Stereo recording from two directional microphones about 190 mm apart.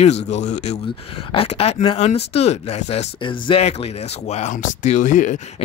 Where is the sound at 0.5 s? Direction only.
35° left (ahead or behind).